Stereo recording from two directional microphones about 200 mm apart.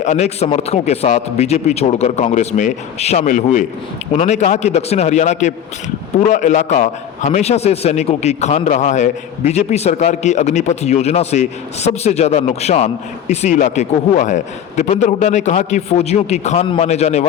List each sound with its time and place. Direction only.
0.0 s a man's voice: 35° left (ahead or behind)